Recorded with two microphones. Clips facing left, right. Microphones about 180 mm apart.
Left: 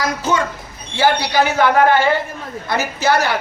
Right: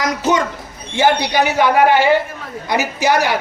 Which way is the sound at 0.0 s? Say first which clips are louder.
Right 2 dB; 20° right (ahead or behind).